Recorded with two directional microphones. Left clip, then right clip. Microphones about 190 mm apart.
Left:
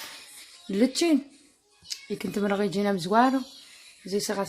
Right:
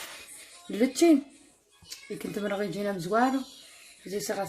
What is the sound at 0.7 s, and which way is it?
Speech, 55° left (ahead or behind).